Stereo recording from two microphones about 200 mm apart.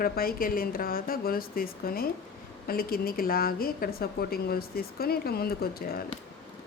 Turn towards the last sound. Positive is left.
turn(degrees=50)  # may be behind; listen again after turning